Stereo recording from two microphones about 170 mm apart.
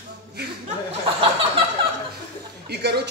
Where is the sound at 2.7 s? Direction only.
75° right (ahead or behind).